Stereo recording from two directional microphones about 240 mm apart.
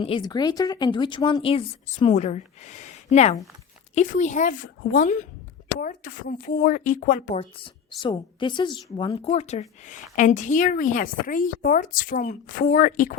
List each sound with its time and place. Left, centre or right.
0.0 s a woman's voice: centre
7.6 s a woman's voice: centre